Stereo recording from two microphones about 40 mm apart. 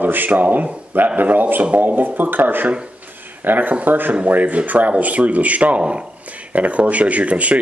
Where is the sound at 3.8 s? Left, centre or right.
Right.